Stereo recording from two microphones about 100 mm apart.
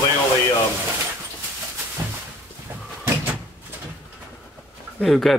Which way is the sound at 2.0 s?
25° right (ahead or behind).